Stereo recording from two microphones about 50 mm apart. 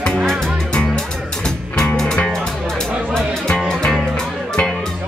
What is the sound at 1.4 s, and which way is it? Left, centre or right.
Music, centre.